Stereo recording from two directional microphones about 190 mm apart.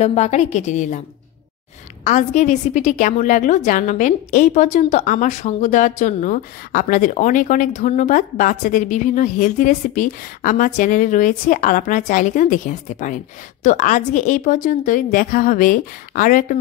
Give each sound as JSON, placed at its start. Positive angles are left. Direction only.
{"t": 0.0, "sound": "a woman's voice", "side_deg": 35}
{"t": 2.0, "sound": "a woman's voice", "side_deg": 40}